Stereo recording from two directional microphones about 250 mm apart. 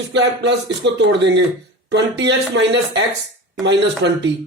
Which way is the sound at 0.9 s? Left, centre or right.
Right.